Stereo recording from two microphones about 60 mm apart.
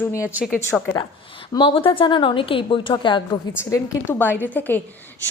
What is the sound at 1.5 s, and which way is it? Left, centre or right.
Speech, left.